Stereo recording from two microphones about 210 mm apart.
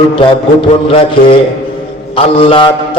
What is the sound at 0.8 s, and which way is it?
Speech, 25° left (ahead or behind).